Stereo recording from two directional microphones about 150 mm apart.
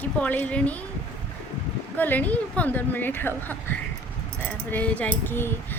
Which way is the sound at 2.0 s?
10° left (ahead or behind).